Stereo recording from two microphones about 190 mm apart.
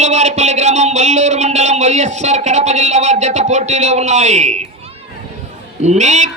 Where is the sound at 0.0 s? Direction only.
35° right (ahead or behind).